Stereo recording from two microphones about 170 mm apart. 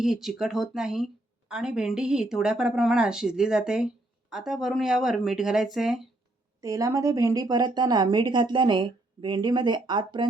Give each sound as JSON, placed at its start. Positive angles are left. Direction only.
{"t": 0.0, "sound": "speech", "side_deg": 0}
{"t": 6.6, "sound": "speech", "side_deg": -20}